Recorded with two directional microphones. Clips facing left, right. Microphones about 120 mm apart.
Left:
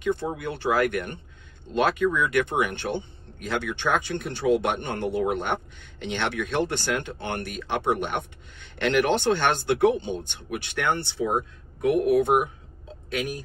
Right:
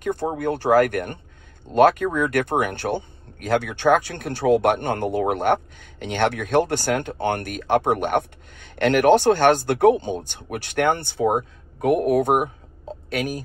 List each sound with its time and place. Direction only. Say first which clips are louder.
0.0 s speech: right 3 dB; 45° right (ahead or behind); by 3.9 s 60° right (ahead or behind)
3.9 s speech: right 6 dB; 50° right (ahead or behind)